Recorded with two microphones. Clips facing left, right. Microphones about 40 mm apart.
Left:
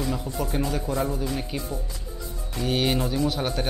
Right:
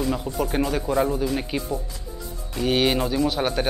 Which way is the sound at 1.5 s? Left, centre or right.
Right.